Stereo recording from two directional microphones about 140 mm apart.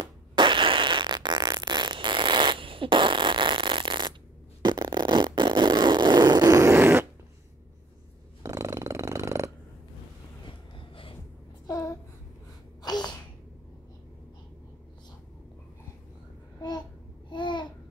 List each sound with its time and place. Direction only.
0.0 s fart: 35° right (ahead or behind)
4.6 s a sound: 30° right (ahead or behind)
8.4 s purr: 20° right (ahead or behind)
11.6 s babbling: 25° left (ahead or behind)
12.8 s sneeze: 30° left (ahead or behind)
17.3 s babbling: 35° left (ahead or behind)